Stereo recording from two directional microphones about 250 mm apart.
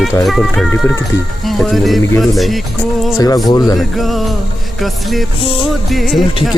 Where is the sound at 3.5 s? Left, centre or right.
Centre.